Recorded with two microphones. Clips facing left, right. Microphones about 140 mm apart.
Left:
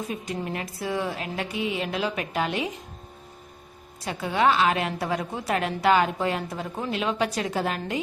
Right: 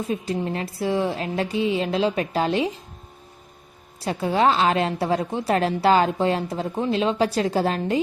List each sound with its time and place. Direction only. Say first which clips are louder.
0.1 s speech: right 5 dB; 30° right (ahead or behind)
4.0 s a woman's voice: right 3 dB; 35° right (ahead or behind)